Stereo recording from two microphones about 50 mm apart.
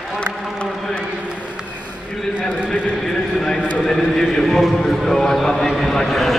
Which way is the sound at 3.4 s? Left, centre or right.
Centre.